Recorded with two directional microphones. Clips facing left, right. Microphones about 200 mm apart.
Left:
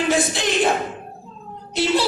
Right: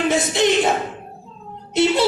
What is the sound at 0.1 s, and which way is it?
Speech, 20° right (ahead or behind).